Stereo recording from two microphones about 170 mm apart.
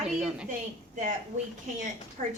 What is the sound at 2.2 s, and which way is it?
Speech, 45° right (ahead or behind).